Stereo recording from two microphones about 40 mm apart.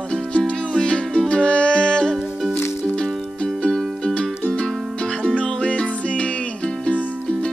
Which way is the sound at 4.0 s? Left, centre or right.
Left.